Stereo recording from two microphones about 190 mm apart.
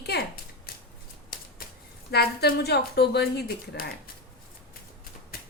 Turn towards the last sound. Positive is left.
turn(degrees=50)  # may be behind; listen again after turning